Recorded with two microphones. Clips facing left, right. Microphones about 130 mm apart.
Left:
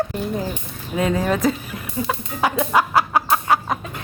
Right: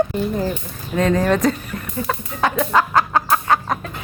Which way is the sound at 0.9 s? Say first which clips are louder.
Right 3 dB; 10° left (ahead or behind).